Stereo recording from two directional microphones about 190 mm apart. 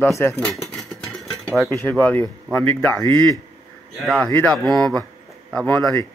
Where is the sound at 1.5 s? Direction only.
Centre (ahead or behind); by 3.3 s 15° left (ahead or behind).